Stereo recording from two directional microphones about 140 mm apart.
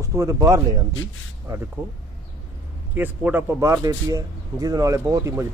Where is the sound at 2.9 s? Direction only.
15° right (ahead or behind).